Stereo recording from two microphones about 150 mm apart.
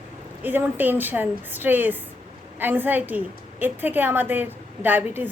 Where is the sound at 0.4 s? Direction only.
15° right (ahead or behind).